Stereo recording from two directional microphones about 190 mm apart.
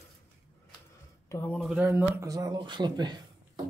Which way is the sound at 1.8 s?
10° right (ahead or behind).